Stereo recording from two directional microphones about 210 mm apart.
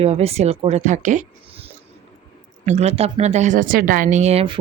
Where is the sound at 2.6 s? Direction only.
30° right (ahead or behind).